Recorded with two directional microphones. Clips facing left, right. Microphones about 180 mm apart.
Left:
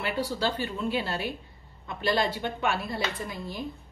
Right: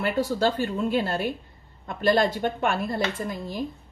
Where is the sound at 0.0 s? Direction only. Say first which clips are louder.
Right 5 dB; 45° right (ahead or behind).